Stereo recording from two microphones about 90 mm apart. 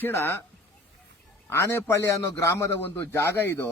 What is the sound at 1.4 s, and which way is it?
A man's voice, 30° left (ahead or behind).